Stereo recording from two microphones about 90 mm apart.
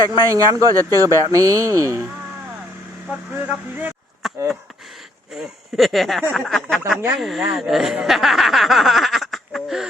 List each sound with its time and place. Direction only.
0.1 s speech: 40° right (ahead or behind)
3.4 s speech: 20° right (ahead or behind)
4.2 s a sound: 5° right (ahead or behind)
5.3 s speech: centre (ahead or behind)